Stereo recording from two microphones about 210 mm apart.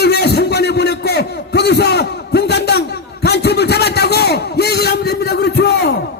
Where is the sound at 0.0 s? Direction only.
50° left (ahead or behind).